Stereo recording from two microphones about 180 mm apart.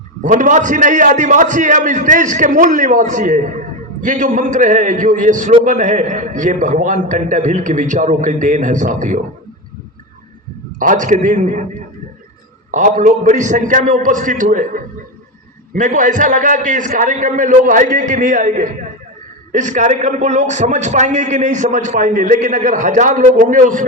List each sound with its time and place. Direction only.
0.2 s a man's voice: 45° right (ahead or behind)
10.8 s a man's voice: 45° right (ahead or behind)
12.7 s a man's voice: 45° right (ahead or behind)